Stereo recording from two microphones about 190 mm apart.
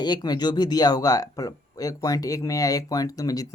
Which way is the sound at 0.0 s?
20° left (ahead or behind).